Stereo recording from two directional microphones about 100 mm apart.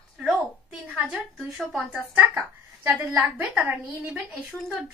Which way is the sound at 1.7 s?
10° right (ahead or behind).